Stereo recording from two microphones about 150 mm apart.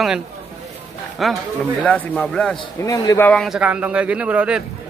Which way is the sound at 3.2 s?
Centre (ahead or behind).